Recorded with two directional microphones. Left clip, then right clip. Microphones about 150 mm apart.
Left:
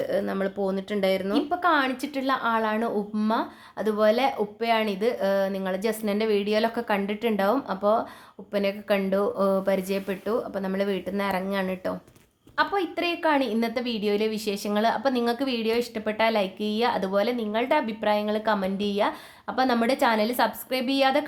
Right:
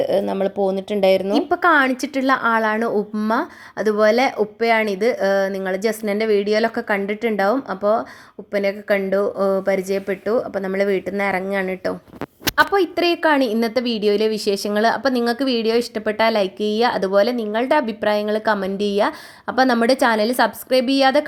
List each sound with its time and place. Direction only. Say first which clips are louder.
0.0 s a woman's voice: right 7 dB; 40° right (ahead or behind)
1.3 s a woman's voice: right 7 dB; 50° right (ahead or behind); by 11.9 s 30° right (ahead or behind)
12.5 s a woman's voice: right 8 dB; 45° right (ahead or behind)